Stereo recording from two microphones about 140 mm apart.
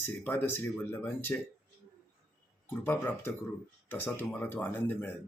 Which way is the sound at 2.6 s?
15° left (ahead or behind).